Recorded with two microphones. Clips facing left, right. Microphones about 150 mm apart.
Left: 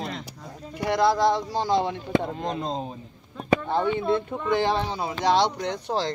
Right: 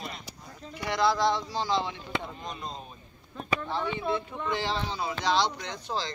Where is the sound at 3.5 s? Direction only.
55° left (ahead or behind).